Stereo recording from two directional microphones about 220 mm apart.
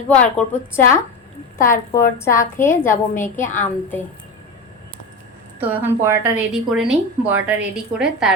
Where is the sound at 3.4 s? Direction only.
35° left (ahead or behind).